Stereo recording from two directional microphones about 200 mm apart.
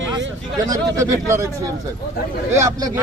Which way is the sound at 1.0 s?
15° right (ahead or behind).